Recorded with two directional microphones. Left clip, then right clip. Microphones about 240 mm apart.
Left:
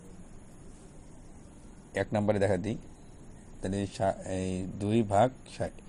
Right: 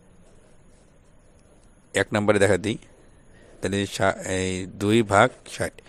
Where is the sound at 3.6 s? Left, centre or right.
Right.